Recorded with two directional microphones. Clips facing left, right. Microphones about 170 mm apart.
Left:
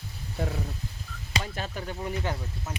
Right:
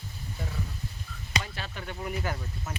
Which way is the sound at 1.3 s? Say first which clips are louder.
Left 3 dB; 40° left (ahead or behind).